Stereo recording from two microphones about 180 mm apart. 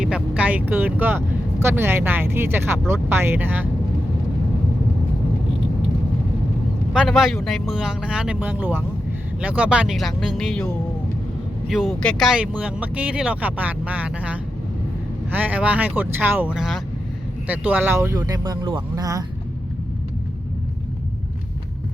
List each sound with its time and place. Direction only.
0.0 s speech: 5° right (ahead or behind)
6.9 s speech: 5° right (ahead or behind)
11.7 s speech: centre (ahead or behind); by 19.2 s 20° right (ahead or behind)